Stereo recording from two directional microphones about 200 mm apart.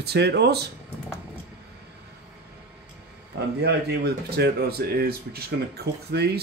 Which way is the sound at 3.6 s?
55° right (ahead or behind).